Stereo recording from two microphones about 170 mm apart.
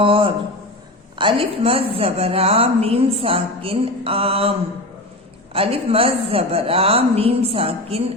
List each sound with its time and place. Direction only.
0.0 s a woman's voice: 30° right (ahead or behind)
5.5 s a woman's voice: 35° right (ahead or behind)